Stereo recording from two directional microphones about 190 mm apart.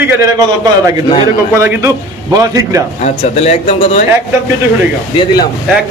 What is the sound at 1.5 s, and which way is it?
A man's voice, 10° right (ahead or behind).